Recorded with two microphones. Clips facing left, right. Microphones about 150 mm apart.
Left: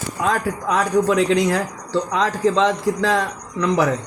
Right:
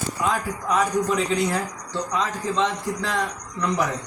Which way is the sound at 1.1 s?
90° left.